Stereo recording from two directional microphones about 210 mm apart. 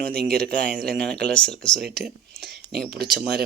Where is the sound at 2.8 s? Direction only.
50° right (ahead or behind).